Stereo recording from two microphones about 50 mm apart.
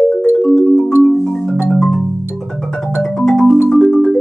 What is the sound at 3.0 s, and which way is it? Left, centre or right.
Music, centre.